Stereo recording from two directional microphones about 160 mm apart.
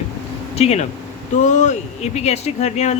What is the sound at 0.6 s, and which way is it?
Speech, 40° left (ahead or behind).